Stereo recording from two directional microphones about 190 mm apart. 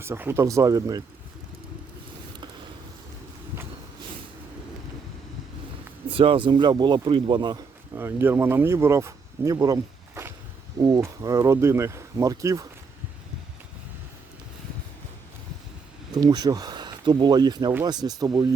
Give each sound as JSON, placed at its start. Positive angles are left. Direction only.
{"t": 0.0, "sound": "speech", "side_deg": -10}
{"t": 6.1, "sound": "speech", "side_deg": -30}
{"t": 7.9, "sound": "speech", "side_deg": -10}
{"t": 16.1, "sound": "speech", "side_deg": -20}